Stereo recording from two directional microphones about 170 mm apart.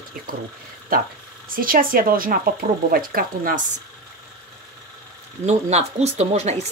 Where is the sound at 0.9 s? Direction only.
55° right (ahead or behind).